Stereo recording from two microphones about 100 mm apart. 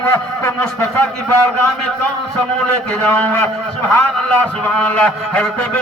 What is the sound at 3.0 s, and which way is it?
Speech, 20° left (ahead or behind).